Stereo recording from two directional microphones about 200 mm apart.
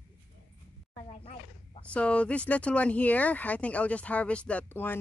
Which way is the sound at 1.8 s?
5° left (ahead or behind).